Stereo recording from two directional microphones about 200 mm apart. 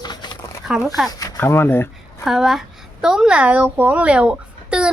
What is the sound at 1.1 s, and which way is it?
Speech, 20° left (ahead or behind).